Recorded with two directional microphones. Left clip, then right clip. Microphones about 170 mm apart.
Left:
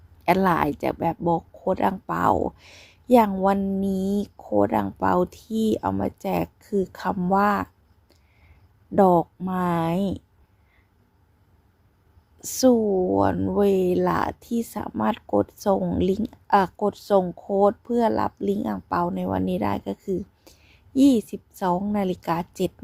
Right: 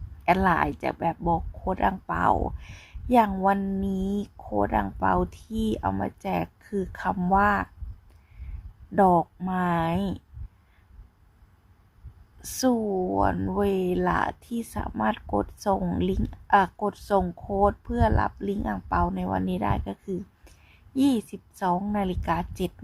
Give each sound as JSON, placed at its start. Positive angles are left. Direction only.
{"t": 0.3, "sound": "speech", "side_deg": 25}
{"t": 9.0, "sound": "speech", "side_deg": 20}
{"t": 12.4, "sound": "speech", "side_deg": 20}